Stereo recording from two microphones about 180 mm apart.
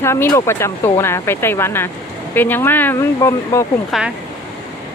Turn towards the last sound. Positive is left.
turn(degrees=-5)  # may be behind; listen again after turning